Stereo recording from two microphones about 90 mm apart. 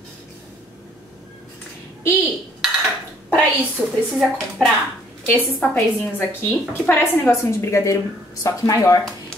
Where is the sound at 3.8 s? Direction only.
15° right (ahead or behind).